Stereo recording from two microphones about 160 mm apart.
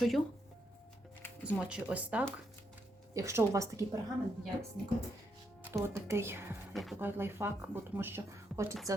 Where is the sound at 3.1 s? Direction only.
20° right (ahead or behind).